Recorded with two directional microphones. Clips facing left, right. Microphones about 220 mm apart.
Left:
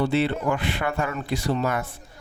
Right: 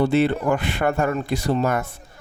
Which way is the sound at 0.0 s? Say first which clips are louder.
Right 4 dB; 45° right (ahead or behind).